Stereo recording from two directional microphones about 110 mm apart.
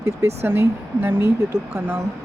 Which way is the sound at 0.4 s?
20° right (ahead or behind).